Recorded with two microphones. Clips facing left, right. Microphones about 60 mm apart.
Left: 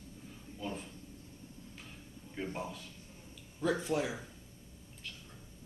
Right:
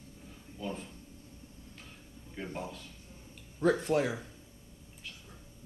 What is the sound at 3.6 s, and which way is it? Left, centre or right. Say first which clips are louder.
Speech: right 5 dB; right.